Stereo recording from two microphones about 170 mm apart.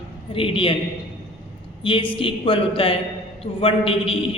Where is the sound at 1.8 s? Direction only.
30° left (ahead or behind).